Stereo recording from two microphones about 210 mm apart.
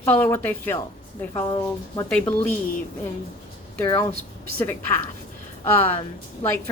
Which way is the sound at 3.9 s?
15° left (ahead or behind).